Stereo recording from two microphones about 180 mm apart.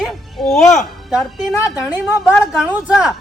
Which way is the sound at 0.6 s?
40° left (ahead or behind).